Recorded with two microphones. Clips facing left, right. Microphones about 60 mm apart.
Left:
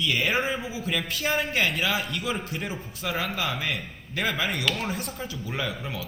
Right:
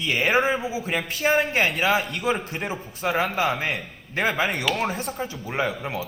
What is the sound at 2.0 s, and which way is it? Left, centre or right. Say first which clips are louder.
Speech: right 4 dB; right.